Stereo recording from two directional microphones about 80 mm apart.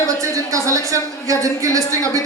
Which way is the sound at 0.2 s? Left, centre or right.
Right.